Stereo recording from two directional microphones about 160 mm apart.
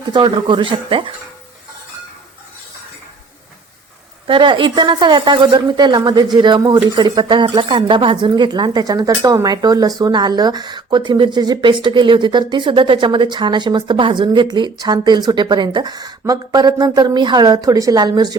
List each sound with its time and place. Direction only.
0.1 s speech: 30° right (ahead or behind)
4.3 s a woman's voice: 30° right (ahead or behind)